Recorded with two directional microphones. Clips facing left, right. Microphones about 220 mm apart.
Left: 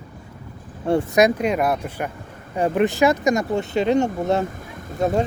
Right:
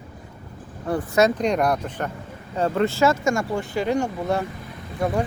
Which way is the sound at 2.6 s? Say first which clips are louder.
Left 2 dB; 15° left (ahead or behind).